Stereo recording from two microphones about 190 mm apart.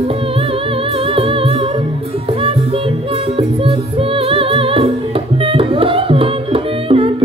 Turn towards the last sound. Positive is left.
turn(degrees=-30)  # may be behind; listen again after turning